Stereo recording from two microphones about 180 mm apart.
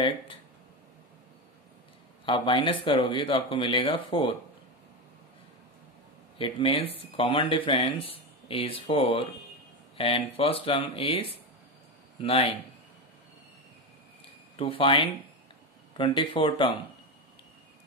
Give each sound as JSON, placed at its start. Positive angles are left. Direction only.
{"t": 2.2, "sound": "speech", "side_deg": 30}
{"t": 6.3, "sound": "speech", "side_deg": 30}
{"t": 14.6, "sound": "speech", "side_deg": 30}